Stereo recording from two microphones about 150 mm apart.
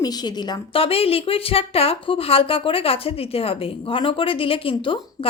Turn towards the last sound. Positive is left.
turn(degrees=35)  # may be behind; listen again after turning